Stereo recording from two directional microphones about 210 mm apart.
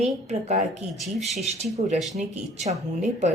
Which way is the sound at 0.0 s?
30° right (ahead or behind).